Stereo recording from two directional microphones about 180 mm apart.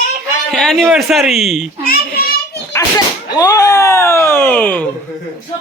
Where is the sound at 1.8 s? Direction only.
55° left (ahead or behind).